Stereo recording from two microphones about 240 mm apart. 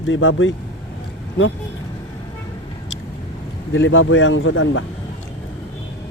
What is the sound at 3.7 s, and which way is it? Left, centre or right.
Speech, left.